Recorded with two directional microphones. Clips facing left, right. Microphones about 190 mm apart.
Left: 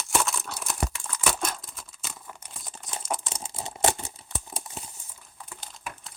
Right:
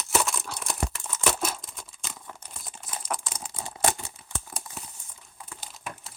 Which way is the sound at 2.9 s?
25° left (ahead or behind).